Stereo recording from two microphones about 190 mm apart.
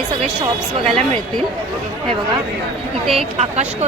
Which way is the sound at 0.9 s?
30° right (ahead or behind).